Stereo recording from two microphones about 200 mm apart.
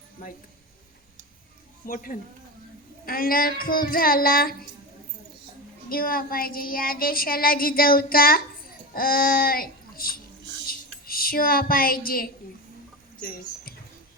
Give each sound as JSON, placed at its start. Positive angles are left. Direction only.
{"t": 0.2, "sound": "child singing", "side_deg": 40}
{"t": 1.9, "sound": "child singing", "side_deg": 45}
{"t": 5.9, "sound": "child singing", "side_deg": 45}
{"t": 8.9, "sound": "speech", "side_deg": 45}